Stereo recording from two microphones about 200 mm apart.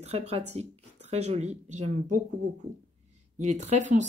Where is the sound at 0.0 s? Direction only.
30° right (ahead or behind).